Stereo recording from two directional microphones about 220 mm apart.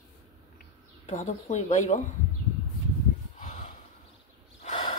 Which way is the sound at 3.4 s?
35° left (ahead or behind).